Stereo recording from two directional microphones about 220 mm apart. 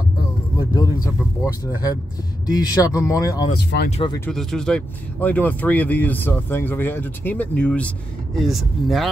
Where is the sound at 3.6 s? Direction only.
50° left (ahead or behind).